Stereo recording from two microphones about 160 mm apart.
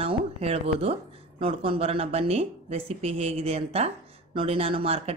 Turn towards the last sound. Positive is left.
turn(degrees=-40)  # may be behind; listen again after turning